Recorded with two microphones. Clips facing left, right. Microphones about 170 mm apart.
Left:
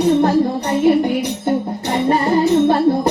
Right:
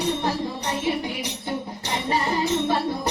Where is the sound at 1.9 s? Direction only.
50° left (ahead or behind).